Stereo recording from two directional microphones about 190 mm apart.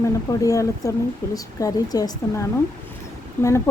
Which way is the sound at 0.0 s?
15° left (ahead or behind).